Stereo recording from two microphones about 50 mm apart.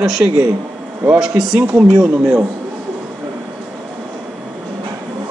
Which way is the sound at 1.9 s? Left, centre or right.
Centre.